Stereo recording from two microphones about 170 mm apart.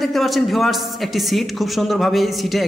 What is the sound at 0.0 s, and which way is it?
A man's voice, centre (ahead or behind).